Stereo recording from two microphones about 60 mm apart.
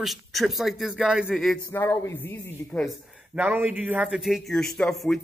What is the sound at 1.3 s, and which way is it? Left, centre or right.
Speech, centre.